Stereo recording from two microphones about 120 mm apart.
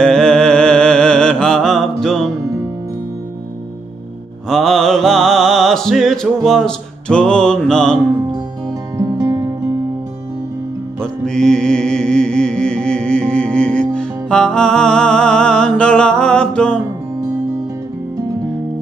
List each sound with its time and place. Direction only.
0.0 s music: 5° left (ahead or behind)
4.5 s music: centre (ahead or behind)
8.9 s music: 30° right (ahead or behind)
11.0 s music: 5° left (ahead or behind)